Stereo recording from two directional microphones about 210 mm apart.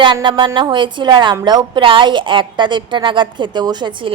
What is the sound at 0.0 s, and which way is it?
A woman's voice, 20° right (ahead or behind).